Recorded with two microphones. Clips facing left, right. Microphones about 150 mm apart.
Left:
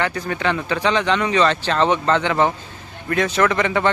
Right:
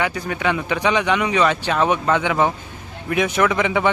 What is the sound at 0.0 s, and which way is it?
Speech, 10° right (ahead or behind).